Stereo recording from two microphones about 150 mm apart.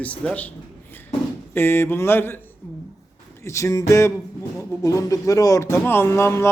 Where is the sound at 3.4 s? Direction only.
20° left (ahead or behind).